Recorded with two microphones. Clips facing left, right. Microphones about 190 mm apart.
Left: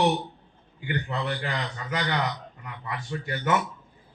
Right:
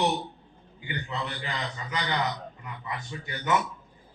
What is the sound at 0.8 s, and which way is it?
A man's voice, 55° left (ahead or behind).